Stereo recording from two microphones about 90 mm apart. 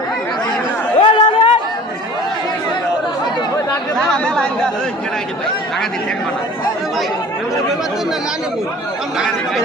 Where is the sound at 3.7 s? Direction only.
10° left (ahead or behind).